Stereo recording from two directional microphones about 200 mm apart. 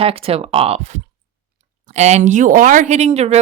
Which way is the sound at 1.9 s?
35° right (ahead or behind).